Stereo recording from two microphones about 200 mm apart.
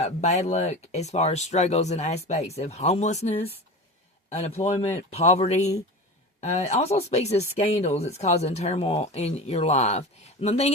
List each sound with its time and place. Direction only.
0.0 s speech: 35° left (ahead or behind)